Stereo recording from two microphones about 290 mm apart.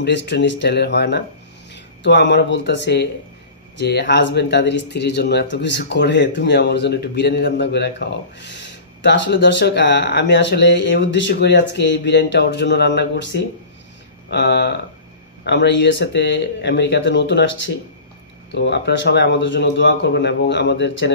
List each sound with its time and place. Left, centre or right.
0.0 s speech: left